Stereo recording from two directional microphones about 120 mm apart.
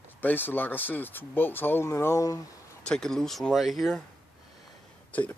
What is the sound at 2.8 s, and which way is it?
Speech, 5° left (ahead or behind).